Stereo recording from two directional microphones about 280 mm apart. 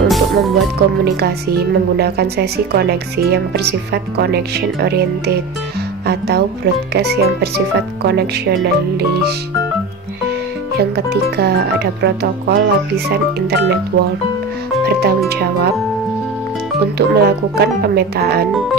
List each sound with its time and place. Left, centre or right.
0.1 s music: centre
0.7 s a woman's voice: right
10.8 s a woman's voice: right
14.9 s a woman's voice: right
17.1 s a woman's voice: right